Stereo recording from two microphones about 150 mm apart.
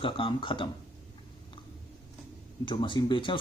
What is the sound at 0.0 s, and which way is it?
Speech, 35° left (ahead or behind).